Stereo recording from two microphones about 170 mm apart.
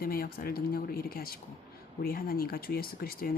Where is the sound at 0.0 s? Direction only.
60° left (ahead or behind).